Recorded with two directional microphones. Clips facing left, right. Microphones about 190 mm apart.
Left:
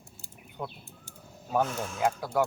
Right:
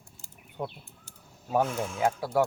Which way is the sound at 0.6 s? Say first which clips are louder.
Right 3 dB; 25° right (ahead or behind).